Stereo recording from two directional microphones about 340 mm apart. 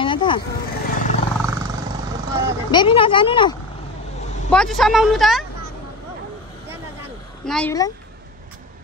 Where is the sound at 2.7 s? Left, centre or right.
Centre.